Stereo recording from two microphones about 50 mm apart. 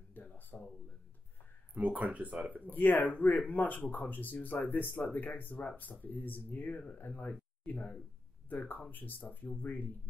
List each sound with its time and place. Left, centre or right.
0.1 s a sound: left
1.7 s speech: right
2.7 s speech: left